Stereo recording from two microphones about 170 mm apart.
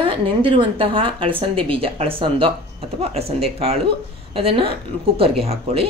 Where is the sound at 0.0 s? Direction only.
30° right (ahead or behind).